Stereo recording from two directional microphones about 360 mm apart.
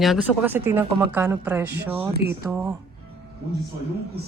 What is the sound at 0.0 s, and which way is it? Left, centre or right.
Speech, centre.